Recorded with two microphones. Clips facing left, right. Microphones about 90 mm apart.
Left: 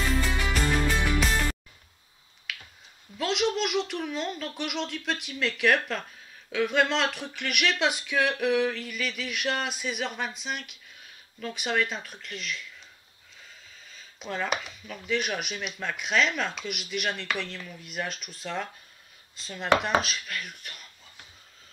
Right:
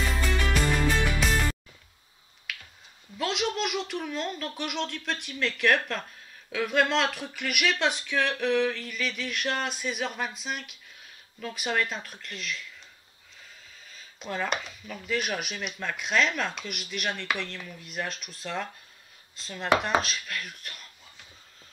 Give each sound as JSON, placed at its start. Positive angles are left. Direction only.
{"t": 0.0, "sound": "music", "side_deg": 0}
{"t": 2.5, "sound": "finger snapping", "side_deg": 0}
{"t": 3.2, "sound": "speech", "side_deg": 0}
{"t": 13.8, "sound": "speech", "side_deg": 0}